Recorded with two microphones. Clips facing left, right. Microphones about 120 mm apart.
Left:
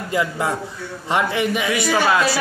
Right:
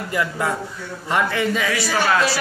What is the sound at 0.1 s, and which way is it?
A man's voice, 20° left (ahead or behind).